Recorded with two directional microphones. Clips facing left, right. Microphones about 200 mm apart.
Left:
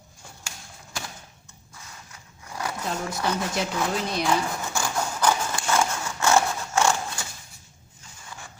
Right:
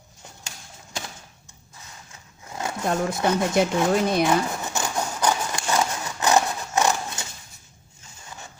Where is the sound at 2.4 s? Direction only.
25° right (ahead or behind).